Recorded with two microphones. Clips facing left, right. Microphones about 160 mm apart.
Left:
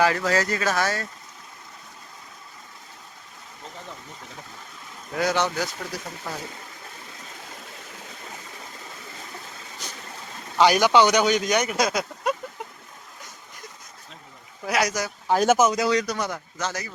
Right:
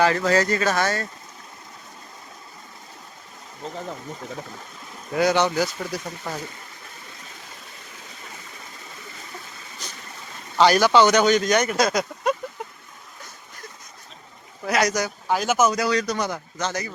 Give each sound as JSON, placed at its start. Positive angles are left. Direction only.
{"t": 0.0, "sound": "speech", "side_deg": 5}
{"t": 5.1, "sound": "speech", "side_deg": 0}
{"t": 10.6, "sound": "speech", "side_deg": 15}
{"t": 14.6, "sound": "speech", "side_deg": 10}
{"t": 15.5, "sound": "speech", "side_deg": 25}
{"t": 16.0, "sound": "speech", "side_deg": 0}